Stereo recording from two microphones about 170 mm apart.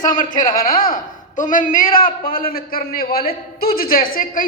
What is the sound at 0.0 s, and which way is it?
A man's voice, 50° left (ahead or behind).